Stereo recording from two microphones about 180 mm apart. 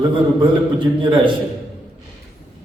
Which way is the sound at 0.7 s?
25° right (ahead or behind).